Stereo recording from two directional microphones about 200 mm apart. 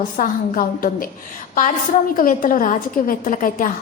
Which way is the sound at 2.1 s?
45° left (ahead or behind).